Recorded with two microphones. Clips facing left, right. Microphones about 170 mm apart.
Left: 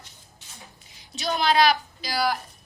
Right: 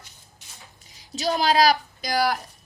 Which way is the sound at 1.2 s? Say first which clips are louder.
Right 1 dB; 35° right (ahead or behind).